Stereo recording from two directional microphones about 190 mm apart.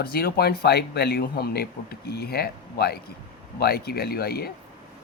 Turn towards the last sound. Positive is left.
turn(degrees=55)  # may be behind; listen again after turning